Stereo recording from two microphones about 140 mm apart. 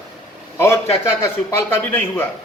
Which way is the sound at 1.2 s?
15° left (ahead or behind).